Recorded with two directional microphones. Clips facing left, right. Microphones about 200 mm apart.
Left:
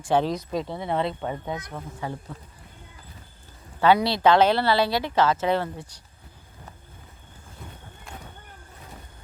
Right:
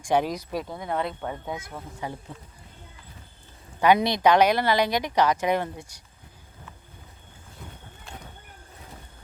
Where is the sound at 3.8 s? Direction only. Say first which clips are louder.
Left 1 dB; 15° right (ahead or behind).